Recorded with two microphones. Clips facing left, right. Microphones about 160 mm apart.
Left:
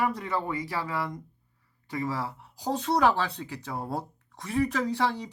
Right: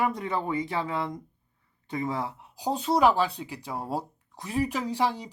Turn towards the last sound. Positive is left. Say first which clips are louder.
# even
turn(degrees=-10)  # may be behind; listen again after turning